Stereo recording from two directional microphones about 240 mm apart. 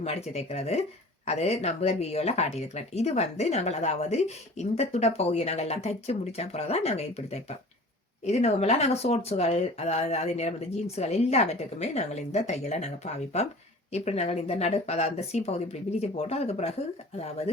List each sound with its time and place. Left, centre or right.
0.0 s speech: left